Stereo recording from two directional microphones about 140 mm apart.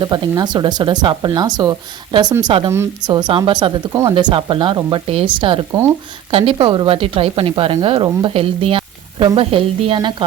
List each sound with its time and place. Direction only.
0.0 s speech: 30° right (ahead or behind)
2.4 s speech: 40° right (ahead or behind)
2.6 s speech: 20° right (ahead or behind)
3.1 s speech: 30° right (ahead or behind)